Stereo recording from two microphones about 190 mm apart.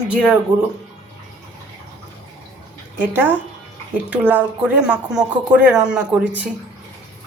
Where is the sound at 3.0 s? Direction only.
10° right (ahead or behind).